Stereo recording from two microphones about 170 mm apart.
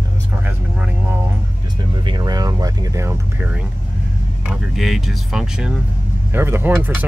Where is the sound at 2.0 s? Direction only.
25° right (ahead or behind).